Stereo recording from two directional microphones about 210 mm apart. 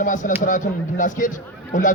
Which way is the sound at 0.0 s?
35° left (ahead or behind).